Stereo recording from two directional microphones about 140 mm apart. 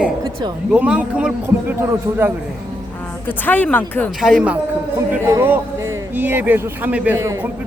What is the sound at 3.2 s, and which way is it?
Speech, 10° left (ahead or behind).